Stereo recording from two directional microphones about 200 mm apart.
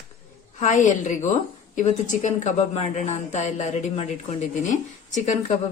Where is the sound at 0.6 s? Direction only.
40° left (ahead or behind).